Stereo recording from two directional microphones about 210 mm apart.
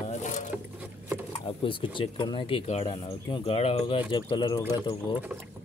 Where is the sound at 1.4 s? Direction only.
25° left (ahead or behind).